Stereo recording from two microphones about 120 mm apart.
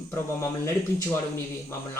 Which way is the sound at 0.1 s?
20° left (ahead or behind).